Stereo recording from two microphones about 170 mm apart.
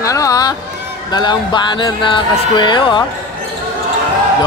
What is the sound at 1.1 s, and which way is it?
Speech, 25° left (ahead or behind).